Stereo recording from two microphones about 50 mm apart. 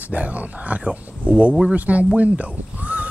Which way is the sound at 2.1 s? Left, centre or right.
Right.